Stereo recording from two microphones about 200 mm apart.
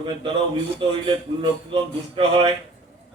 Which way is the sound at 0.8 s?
25° right (ahead or behind).